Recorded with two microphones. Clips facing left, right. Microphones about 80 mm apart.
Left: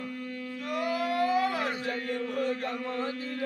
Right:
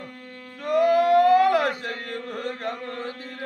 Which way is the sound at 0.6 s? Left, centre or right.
Right.